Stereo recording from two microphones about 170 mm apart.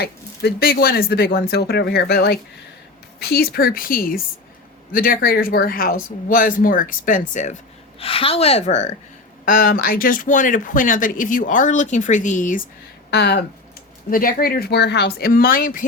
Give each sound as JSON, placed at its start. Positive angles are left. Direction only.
{"t": 0.0, "sound": "speech", "side_deg": 65}
{"t": 9.5, "sound": "speech", "side_deg": 60}
{"t": 13.1, "sound": "speech", "side_deg": 75}
{"t": 14.1, "sound": "speech", "side_deg": 55}